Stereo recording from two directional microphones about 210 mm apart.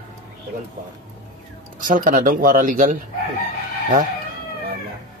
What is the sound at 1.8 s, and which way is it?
Speech, 40° right (ahead or behind).